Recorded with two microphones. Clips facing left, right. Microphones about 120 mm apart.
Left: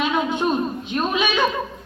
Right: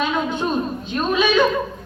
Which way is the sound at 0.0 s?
15° left (ahead or behind).